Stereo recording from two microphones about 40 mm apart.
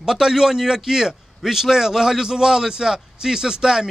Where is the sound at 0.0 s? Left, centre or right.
Centre.